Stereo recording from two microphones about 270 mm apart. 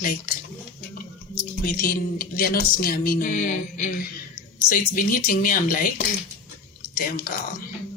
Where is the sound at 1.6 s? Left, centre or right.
Left.